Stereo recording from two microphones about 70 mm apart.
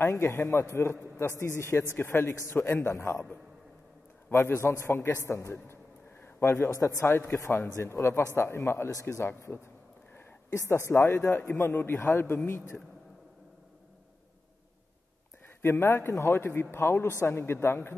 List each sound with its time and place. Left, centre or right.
0.0 s a man's voice: left
0.7 s a man's voice: left
4.3 s a man's voice: left
6.2 s a sound: left
7.0 s a man's voice: left
10.5 s a man's voice: left
15.6 s a man's voice: left